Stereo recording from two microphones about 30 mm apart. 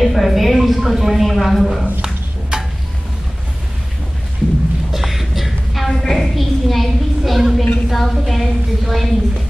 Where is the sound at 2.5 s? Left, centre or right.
Right.